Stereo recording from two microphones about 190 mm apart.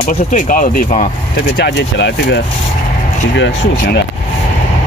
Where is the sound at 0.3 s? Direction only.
45° left (ahead or behind).